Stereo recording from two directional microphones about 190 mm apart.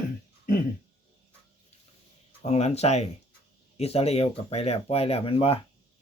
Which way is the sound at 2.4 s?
35° left (ahead or behind).